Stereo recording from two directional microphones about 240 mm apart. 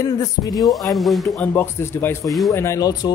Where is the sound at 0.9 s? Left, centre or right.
Centre.